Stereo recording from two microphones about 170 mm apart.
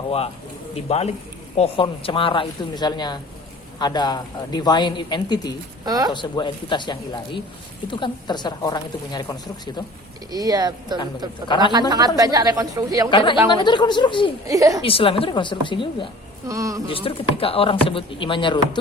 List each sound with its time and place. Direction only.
0.9 s speech: 40° left (ahead or behind)
5.8 s speech: 20° right (ahead or behind)
6.1 s speech: 25° left (ahead or behind)
10.3 s speech: 20° right (ahead or behind)
11.4 s speech: 25° left (ahead or behind)
11.7 s speech: 25° right (ahead or behind)
13.1 s speech: 25° left (ahead or behind)
14.4 s speech: 20° right (ahead or behind)
14.8 s speech: 35° left (ahead or behind)
16.5 s speech: 20° right (ahead or behind)
16.9 s speech: 30° left (ahead or behind)